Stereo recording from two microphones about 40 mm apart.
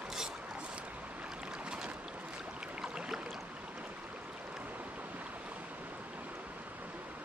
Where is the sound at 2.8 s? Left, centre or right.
Centre.